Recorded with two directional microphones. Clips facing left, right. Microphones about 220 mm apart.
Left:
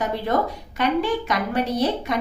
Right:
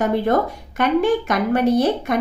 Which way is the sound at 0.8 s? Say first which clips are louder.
Right 5 dB; 50° right (ahead or behind).